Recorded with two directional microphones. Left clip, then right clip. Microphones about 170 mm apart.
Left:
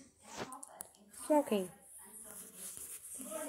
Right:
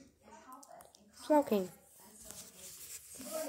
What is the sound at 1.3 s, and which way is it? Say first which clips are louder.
Speech: right 2 dB; centre (ahead or behind).